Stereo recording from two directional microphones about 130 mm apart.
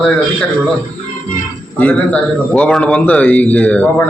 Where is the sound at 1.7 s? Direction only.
10° left (ahead or behind).